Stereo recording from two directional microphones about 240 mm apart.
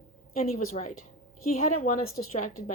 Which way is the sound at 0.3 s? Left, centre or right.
Left.